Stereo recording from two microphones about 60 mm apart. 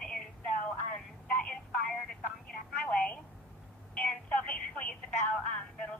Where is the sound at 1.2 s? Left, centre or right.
Centre.